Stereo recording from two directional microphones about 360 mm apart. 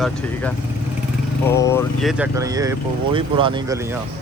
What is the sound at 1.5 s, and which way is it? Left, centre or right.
Speech, centre.